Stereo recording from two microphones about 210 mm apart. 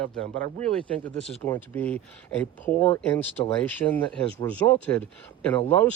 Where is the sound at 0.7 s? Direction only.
5° left (ahead or behind).